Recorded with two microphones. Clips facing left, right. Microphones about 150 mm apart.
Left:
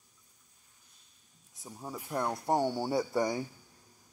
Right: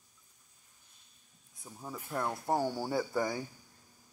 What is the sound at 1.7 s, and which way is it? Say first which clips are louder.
Speech: left 2 dB; 15° left (ahead or behind).